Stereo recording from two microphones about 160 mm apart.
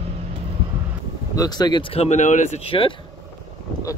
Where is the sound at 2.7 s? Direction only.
35° left (ahead or behind).